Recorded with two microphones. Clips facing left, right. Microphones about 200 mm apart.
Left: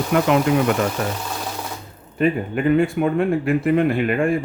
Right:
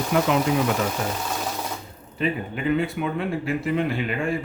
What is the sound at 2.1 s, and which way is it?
Speech, 50° left (ahead or behind).